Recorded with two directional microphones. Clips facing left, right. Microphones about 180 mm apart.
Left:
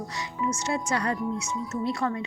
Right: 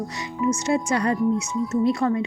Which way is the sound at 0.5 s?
15° right (ahead or behind).